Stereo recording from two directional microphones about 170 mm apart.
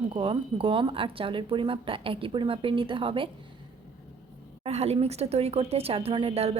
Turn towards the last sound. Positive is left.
turn(degrees=-35)  # may be behind; listen again after turning